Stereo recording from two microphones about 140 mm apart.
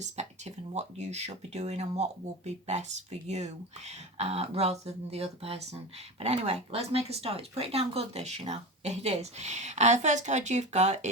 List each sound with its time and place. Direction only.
0.0 s speech: 50° right (ahead or behind)